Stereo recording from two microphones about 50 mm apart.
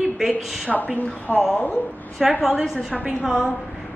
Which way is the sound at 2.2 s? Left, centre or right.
Centre.